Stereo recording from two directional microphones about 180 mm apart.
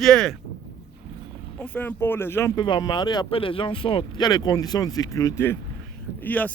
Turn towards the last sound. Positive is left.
turn(degrees=10)  # may be behind; listen again after turning